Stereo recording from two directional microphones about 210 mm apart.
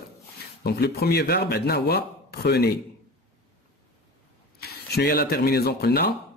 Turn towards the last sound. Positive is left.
turn(degrees=50)  # may be behind; listen again after turning